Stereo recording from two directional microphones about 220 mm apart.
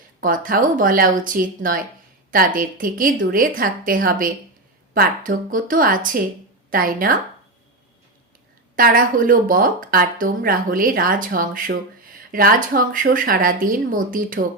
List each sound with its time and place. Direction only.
0.2 s speech: 40° right (ahead or behind)
8.7 s speech: 40° right (ahead or behind)